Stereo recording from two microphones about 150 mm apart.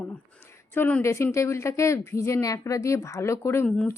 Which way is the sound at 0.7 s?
15° left (ahead or behind).